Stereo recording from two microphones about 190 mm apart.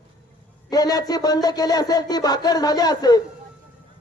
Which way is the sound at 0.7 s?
20° left (ahead or behind).